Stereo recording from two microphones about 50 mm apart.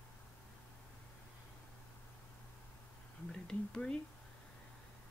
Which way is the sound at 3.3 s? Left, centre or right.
Centre.